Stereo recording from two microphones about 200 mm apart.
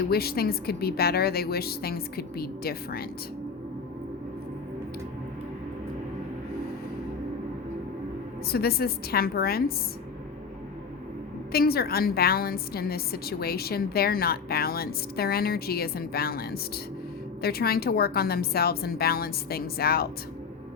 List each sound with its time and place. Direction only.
0.1 s a woman's voice: 50° left (ahead or behind)
8.5 s a woman's voice: 50° left (ahead or behind)
11.5 s a woman's voice: 50° left (ahead or behind)